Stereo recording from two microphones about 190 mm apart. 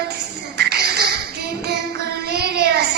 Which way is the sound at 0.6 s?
55° right (ahead or behind).